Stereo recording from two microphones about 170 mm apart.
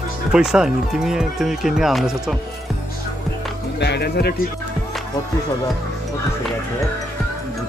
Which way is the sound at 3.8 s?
75° left (ahead or behind).